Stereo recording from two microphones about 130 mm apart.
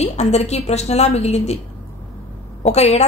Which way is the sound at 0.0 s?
55° left (ahead or behind).